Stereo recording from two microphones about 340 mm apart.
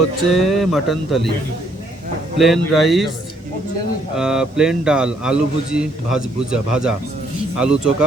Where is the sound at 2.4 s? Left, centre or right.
Centre.